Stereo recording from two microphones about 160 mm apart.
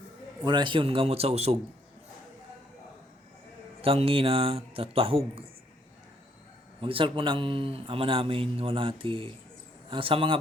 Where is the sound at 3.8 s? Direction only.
35° right (ahead or behind).